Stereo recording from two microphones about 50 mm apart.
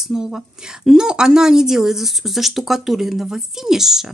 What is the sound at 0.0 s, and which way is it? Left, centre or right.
Speech, centre.